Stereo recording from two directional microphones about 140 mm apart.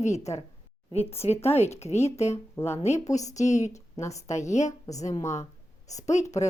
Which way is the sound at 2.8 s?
55° left (ahead or behind).